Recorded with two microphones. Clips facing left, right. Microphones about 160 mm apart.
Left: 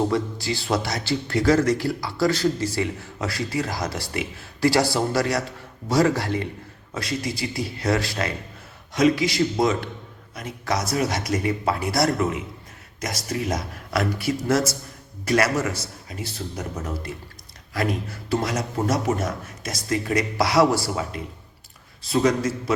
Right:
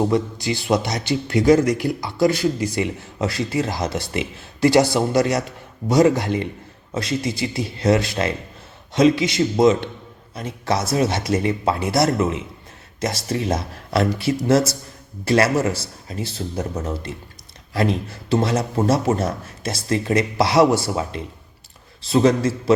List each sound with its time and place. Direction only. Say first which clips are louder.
0.1 s speech: right 4 dB; 20° right (ahead or behind)